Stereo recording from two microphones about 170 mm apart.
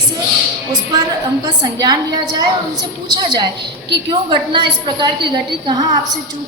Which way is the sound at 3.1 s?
25° right (ahead or behind).